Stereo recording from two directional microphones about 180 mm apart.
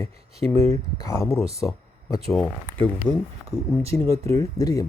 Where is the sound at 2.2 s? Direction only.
5° left (ahead or behind).